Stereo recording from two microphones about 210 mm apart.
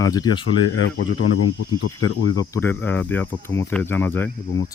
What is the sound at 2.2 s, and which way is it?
Cricket, 15° left (ahead or behind).